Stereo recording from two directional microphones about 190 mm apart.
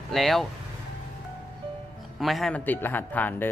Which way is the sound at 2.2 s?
Centre (ahead or behind).